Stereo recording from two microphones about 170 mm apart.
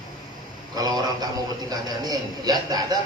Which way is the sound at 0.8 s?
20° right (ahead or behind).